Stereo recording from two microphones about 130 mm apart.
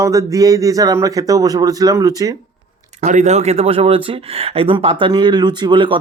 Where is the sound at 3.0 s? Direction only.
65° right (ahead or behind); by 6.0 s 40° right (ahead or behind).